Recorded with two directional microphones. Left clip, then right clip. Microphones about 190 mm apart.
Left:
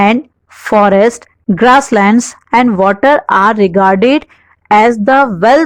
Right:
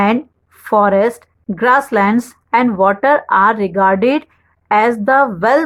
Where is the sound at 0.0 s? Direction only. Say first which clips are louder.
Left 5 dB; 40° left (ahead or behind).